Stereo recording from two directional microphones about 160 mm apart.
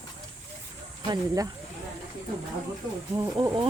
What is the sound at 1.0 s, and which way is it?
Speech, 25° right (ahead or behind).